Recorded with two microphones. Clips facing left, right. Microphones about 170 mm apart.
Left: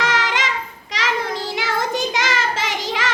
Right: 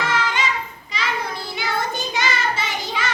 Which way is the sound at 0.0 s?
90° left.